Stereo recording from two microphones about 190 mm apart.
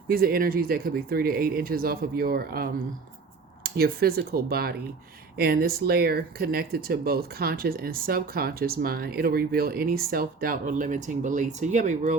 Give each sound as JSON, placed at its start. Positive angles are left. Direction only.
{"t": 0.1, "sound": "speech", "side_deg": -50}